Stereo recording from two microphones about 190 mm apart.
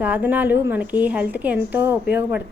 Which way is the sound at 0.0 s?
10° right (ahead or behind).